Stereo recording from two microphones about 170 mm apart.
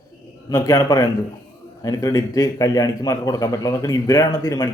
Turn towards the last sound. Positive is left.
turn(degrees=20)  # may be behind; listen again after turning